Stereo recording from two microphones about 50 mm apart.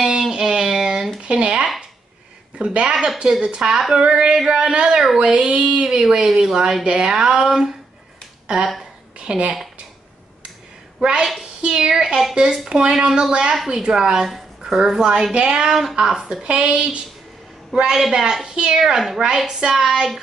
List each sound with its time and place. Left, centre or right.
0.3 s a sound: centre
1.2 s a woman's voice: right
2.9 s a woman's voice: centre
5.3 s speech: right
9.2 s speech: centre
11.0 s a woman's voice: centre
16.4 s a woman's voice: right
18.9 s a woman's voice: centre